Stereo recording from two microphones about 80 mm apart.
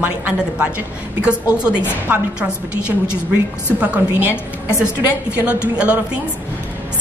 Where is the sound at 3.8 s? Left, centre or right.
Right.